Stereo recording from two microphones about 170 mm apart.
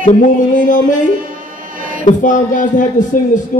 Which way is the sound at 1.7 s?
55° right (ahead or behind).